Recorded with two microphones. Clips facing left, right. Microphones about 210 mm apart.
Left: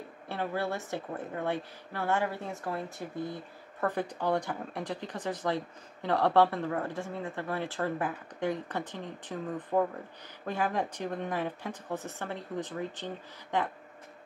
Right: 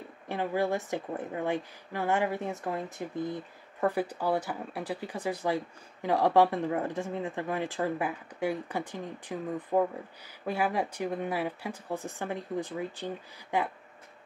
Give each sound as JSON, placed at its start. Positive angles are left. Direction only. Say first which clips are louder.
{"t": 0.3, "sound": "speech", "louder": "right 4 dB", "side_deg": -15}